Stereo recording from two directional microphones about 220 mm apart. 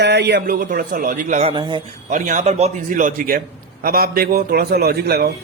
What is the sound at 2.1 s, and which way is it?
A man's voice, 35° right (ahead or behind).